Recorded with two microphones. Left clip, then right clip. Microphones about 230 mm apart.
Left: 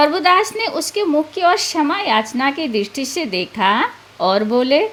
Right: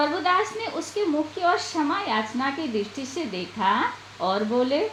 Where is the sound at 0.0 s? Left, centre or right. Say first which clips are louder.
Left 9 dB; left.